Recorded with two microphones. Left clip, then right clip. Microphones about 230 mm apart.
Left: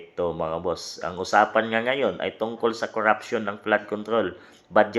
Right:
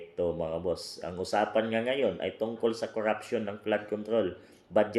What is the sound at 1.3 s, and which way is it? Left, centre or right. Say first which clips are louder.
Speech: left 8 dB; left.